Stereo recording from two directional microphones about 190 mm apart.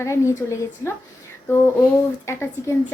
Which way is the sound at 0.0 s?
15° left (ahead or behind).